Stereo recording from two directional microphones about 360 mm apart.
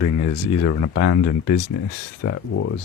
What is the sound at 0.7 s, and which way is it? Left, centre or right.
Speech, left.